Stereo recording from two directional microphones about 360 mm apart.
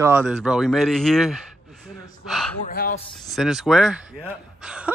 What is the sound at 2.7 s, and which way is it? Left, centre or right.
Speech, left.